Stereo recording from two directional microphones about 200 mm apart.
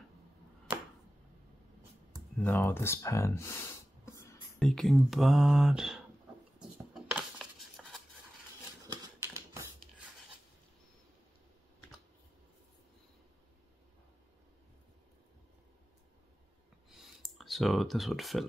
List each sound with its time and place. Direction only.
2.4 s speech: 10° left (ahead or behind)
4.6 s speech: 5° left (ahead or behind)
6.6 s a sound: 5° right (ahead or behind)
8.8 s typewriter: 20° right (ahead or behind)
16.9 s clicking: centre (ahead or behind)